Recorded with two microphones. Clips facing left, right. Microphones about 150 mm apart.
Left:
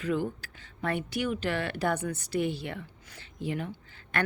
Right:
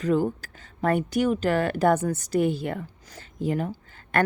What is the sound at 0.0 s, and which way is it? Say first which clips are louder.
Speech: right 7 dB; 40° right (ahead or behind).